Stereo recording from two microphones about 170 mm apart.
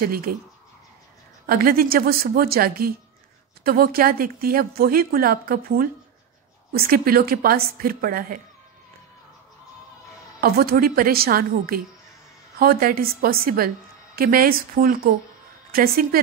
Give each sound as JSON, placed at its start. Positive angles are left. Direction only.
{"t": 0.0, "sound": "a woman's voice", "side_deg": -60}
{"t": 1.5, "sound": "a woman's voice", "side_deg": -60}
{"t": 10.4, "sound": "a woman's voice", "side_deg": -65}